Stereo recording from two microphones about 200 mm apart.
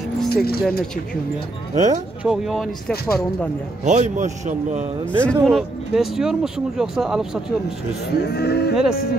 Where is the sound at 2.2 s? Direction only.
Centre (ahead or behind).